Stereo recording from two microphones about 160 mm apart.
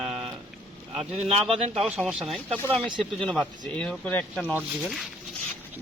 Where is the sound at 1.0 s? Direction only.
40° right (ahead or behind).